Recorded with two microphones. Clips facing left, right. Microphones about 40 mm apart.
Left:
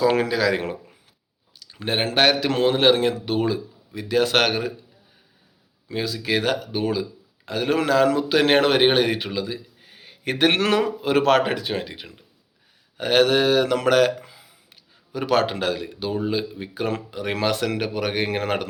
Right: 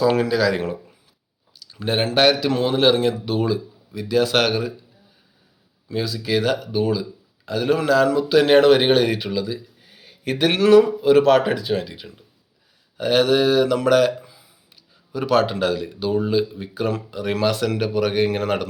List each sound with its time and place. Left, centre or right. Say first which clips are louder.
0.1 s speech: right 2 dB; left
1.5 s a sound: right 2 dB; left
2.1 s speech: right 2 dB; left
2.5 s speech: even; left
5.9 s a man's voice: right 2 dB; left
11.7 s speech: right 4 dB; left
13.0 s speech: right 1 dB; left
14.2 s a sound: even; left
14.7 s speech: right 1 dB; left